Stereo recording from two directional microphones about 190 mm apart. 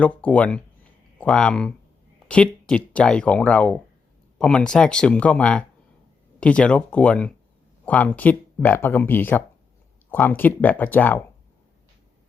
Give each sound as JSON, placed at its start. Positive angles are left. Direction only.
{"t": 0.0, "sound": "speech", "side_deg": 5}